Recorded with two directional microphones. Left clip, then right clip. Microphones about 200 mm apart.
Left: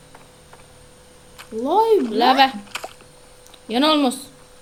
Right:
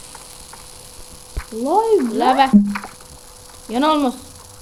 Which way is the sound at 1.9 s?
5° right (ahead or behind).